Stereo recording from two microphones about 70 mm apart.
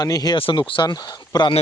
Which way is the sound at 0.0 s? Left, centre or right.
Left.